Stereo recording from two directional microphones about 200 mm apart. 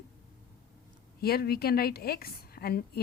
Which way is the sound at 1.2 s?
50° left (ahead or behind).